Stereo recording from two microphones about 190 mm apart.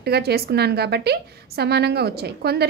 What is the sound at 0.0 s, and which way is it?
A woman's voice, 55° right (ahead or behind).